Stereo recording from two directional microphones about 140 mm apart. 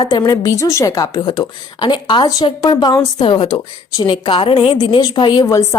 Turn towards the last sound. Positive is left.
turn(degrees=35)  # may be behind; listen again after turning